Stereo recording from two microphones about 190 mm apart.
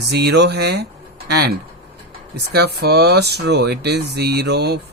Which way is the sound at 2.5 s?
60° right (ahead or behind).